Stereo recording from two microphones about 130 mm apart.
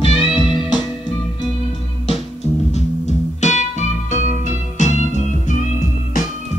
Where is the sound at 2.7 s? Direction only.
65° left (ahead or behind).